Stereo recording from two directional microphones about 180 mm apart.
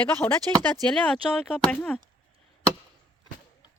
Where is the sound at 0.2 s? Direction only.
10° left (ahead or behind).